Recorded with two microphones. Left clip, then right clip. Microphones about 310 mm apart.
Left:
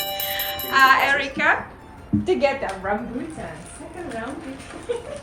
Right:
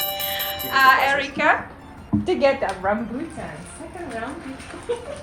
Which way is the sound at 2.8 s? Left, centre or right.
Right.